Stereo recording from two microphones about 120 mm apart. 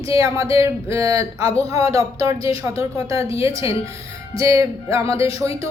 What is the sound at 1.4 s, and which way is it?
Speech, 55° left (ahead or behind).